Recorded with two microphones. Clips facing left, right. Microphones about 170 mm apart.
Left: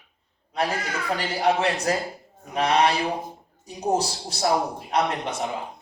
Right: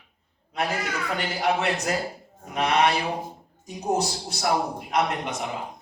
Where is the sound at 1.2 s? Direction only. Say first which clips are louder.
Left 3 dB; 35° left (ahead or behind).